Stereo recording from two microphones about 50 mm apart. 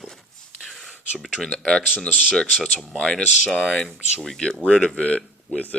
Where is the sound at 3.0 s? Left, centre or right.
Centre.